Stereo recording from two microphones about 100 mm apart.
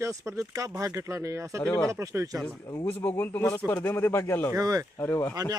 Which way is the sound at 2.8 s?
15° left (ahead or behind).